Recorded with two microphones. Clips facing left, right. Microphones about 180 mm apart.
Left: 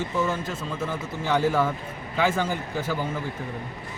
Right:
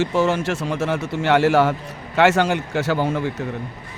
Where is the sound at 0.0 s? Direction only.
80° right.